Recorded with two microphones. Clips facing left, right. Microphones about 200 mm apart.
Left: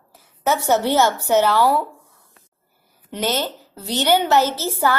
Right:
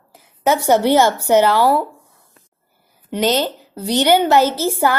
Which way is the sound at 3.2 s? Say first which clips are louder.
Right 5 dB; 15° right (ahead or behind).